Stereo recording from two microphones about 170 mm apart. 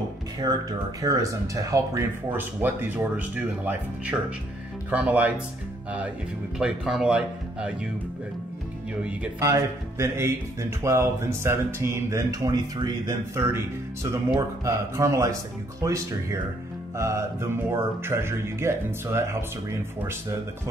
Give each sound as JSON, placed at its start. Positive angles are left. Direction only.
{"t": 1.0, "sound": "speech", "side_deg": -20}
{"t": 9.4, "sound": "speech", "side_deg": -20}